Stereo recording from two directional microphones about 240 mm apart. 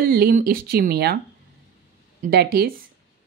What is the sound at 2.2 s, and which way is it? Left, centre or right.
Speech, right.